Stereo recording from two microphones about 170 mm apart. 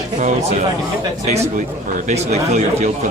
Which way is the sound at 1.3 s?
40° right (ahead or behind).